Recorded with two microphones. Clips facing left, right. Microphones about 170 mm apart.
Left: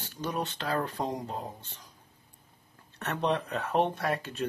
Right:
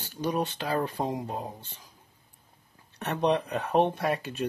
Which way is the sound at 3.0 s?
15° right (ahead or behind).